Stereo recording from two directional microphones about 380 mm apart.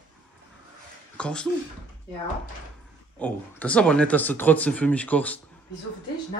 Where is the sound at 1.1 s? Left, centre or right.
Centre.